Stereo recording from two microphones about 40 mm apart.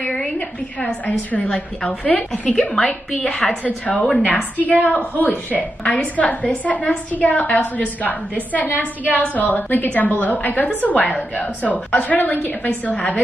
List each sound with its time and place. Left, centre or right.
1.0 s a woman's voice: left
2.7 s a woman's voice: left
3.3 s a woman's voice: centre
3.6 s a woman's voice: left